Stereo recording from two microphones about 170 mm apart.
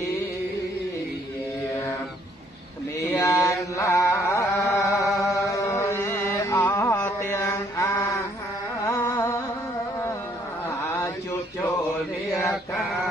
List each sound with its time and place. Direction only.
3.1 s chant: 15° left (ahead or behind)
8.8 s carnatic music: 15° left (ahead or behind)